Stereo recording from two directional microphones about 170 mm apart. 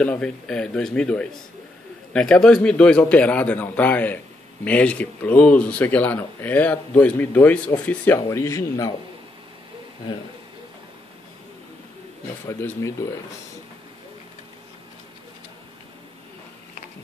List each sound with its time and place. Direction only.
0.0 s speech: 5° left (ahead or behind)
12.4 s speech: 15° left (ahead or behind)